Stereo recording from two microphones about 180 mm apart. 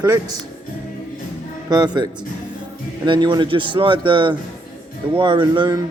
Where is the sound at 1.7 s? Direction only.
20° right (ahead or behind).